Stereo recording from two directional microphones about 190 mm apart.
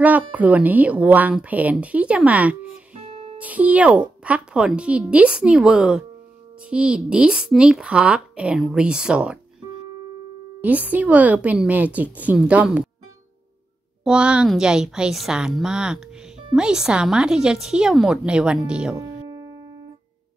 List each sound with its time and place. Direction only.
0.0 s a woman's voice: 10° right (ahead or behind)
2.9 s music: 30° right (ahead or behind)
3.3 s a woman's voice: 5° right (ahead or behind)
10.6 s a woman's voice: 10° right (ahead or behind)
14.0 s speech: 5° right (ahead or behind)
18.9 s music: 20° right (ahead or behind)